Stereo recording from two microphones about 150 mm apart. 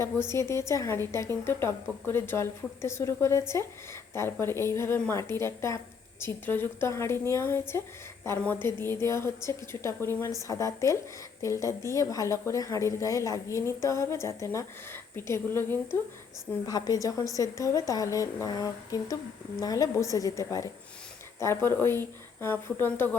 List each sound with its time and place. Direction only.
0.0 s a woman's voice: 20° left (ahead or behind)